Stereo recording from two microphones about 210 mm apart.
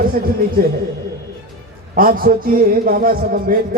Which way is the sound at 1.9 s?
40° right (ahead or behind).